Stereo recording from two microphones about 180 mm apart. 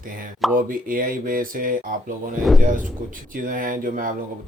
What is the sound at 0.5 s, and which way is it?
Speech, 50° right (ahead or behind).